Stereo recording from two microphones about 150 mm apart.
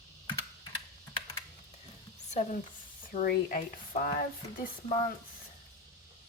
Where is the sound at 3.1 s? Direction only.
65° left (ahead or behind).